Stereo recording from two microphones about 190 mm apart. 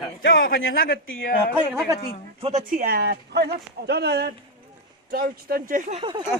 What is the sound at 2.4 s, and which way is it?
Speech, 40° right (ahead or behind).